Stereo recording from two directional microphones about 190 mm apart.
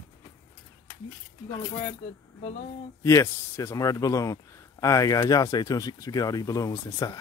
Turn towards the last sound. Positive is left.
turn(degrees=20)  # may be behind; listen again after turning